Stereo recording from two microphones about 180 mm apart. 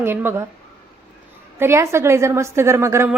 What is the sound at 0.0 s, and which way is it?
Speech, 10° right (ahead or behind).